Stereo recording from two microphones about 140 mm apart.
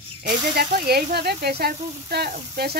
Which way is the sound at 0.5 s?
90° right.